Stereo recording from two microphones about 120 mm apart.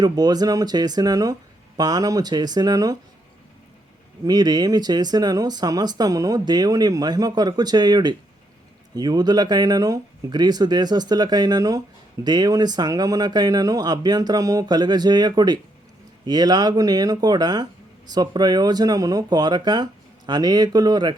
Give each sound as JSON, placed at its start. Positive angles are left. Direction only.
{"t": 0.0, "sound": "speech", "side_deg": -35}
{"t": 4.3, "sound": "speech", "side_deg": -35}